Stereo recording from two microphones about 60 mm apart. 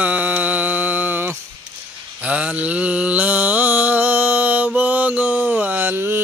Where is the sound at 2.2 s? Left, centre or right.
Right.